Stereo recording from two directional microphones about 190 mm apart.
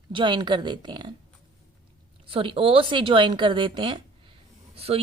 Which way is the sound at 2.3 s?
30° right (ahead or behind).